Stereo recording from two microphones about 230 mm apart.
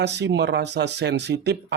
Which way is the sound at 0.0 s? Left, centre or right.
Right.